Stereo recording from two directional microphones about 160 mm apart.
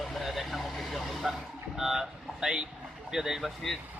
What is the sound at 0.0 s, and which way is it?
Vehicle, centre (ahead or behind).